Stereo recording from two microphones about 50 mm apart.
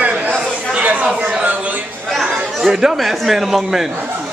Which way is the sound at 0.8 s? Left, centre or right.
Right.